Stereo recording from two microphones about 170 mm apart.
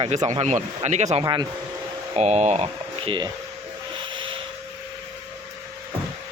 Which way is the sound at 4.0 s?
30° right (ahead or behind).